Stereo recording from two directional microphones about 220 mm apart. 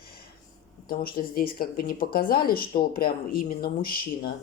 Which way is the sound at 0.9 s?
40° left (ahead or behind).